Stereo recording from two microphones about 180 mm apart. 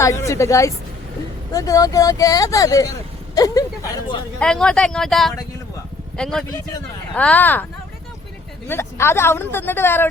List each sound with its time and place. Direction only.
0.0 s speech: 15° left (ahead or behind)
4.4 s speech: 5° left (ahead or behind)
8.6 s speech: 15° left (ahead or behind)